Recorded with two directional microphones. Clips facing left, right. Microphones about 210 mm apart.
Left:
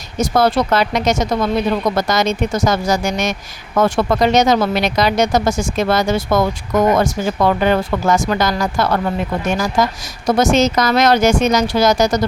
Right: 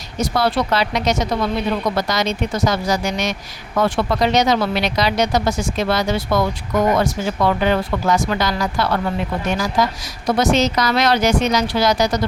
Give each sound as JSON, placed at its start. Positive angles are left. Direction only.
{"t": 0.2, "sound": "speech", "side_deg": 45}